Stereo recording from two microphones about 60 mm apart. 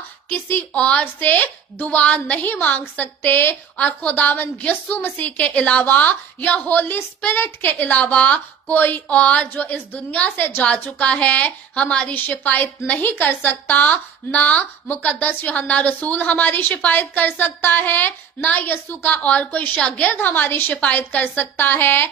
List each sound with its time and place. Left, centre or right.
0.3 s a woman's voice: left
0.7 s a woman's voice: left
10.8 s a woman's voice: left
12.1 s a woman's voice: left
19.2 s a woman's voice: left